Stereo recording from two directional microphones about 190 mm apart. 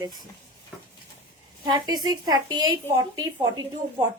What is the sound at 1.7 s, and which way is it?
A woman's voice, 20° right (ahead or behind).